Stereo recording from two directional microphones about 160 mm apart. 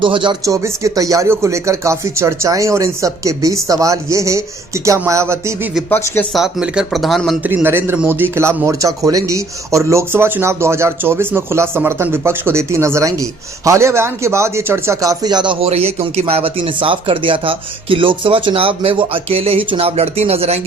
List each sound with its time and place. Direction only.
0.0 s a man's voice: 30° right (ahead or behind)
6.3 s speech: 5° right (ahead or behind)
7.4 s a man's voice: 15° right (ahead or behind); by 20.6 s 40° right (ahead or behind)